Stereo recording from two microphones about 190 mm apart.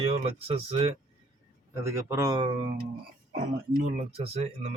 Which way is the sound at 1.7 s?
15° right (ahead or behind).